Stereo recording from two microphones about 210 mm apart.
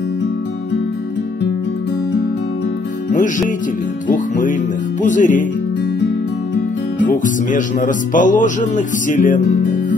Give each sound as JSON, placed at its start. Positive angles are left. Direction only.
{"t": 3.1, "sound": "music", "side_deg": 35}
{"t": 4.1, "sound": "speech", "side_deg": 40}
{"t": 7.0, "sound": "speech", "side_deg": 40}